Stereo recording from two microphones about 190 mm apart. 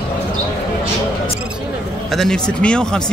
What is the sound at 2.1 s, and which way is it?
Speech, 5° left (ahead or behind).